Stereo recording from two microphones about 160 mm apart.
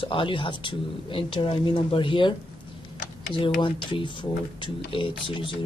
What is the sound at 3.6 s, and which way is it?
Speech, 30° left (ahead or behind).